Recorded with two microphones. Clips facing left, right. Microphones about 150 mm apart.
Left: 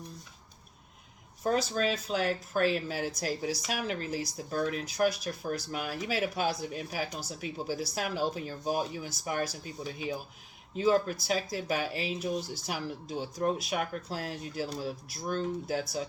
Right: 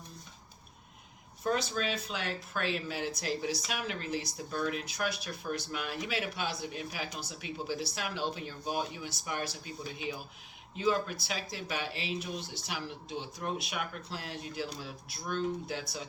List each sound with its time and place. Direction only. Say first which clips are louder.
1.5 s speech: left 3 dB; 40° left (ahead or behind)